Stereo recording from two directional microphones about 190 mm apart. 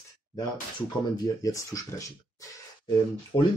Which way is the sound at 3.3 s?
30° left (ahead or behind).